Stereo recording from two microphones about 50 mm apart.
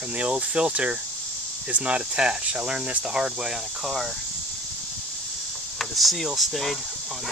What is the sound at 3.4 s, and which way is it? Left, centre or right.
Speech, centre.